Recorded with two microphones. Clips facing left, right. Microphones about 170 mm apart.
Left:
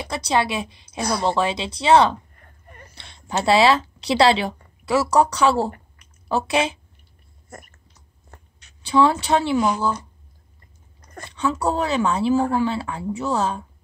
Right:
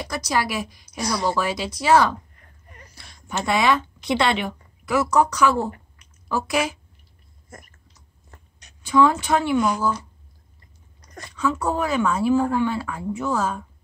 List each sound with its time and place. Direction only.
0.0 s a woman's voice: 25° left (ahead or behind)
2.9 s a sound: 25° left (ahead or behind)
3.6 s speech: 90° left
4.3 s a woman's voice: 30° left (ahead or behind)
8.8 s a woman's voice: 30° left (ahead or behind)
11.2 s a woman's voice: 30° left (ahead or behind)